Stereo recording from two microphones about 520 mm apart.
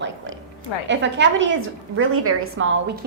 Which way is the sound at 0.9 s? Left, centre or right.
Centre.